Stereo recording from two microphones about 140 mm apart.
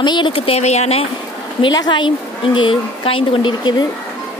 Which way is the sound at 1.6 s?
30° left (ahead or behind).